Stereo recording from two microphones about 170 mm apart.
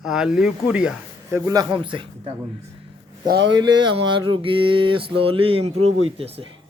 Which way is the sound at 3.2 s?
80° right.